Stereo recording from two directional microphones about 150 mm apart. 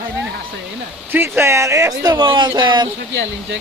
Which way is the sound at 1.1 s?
15° right (ahead or behind).